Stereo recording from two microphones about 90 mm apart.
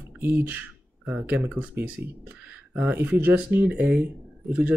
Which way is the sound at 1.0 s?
Centre (ahead or behind).